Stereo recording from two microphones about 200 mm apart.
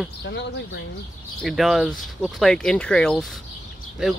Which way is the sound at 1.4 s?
Centre (ahead or behind).